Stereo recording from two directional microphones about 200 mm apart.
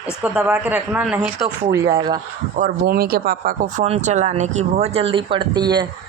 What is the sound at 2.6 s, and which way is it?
Speech, 45° right (ahead or behind).